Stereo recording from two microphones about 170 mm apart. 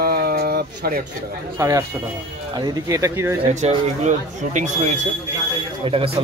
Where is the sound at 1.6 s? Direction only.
20° right (ahead or behind).